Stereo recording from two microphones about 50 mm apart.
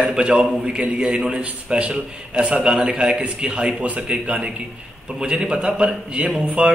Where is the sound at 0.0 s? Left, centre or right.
Centre.